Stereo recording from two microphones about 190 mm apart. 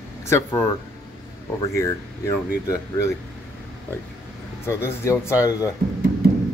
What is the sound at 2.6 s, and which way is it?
Speech, 15° left (ahead or behind).